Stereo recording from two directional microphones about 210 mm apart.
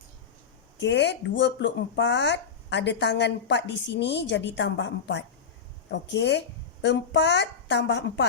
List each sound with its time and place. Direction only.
0.8 s speech: 55° left (ahead or behind)